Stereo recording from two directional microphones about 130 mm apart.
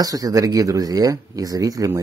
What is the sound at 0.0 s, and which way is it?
Speech, 30° right (ahead or behind).